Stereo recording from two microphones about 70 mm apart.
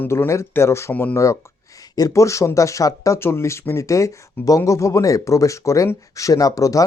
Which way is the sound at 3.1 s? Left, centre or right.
Left.